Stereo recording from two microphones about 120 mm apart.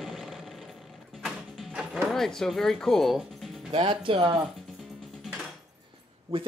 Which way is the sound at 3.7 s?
45° right (ahead or behind).